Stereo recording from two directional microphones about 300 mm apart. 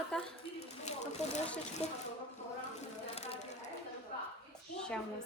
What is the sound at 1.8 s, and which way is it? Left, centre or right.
Speech, left.